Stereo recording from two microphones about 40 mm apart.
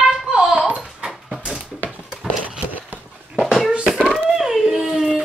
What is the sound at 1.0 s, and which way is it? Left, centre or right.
Dog, centre.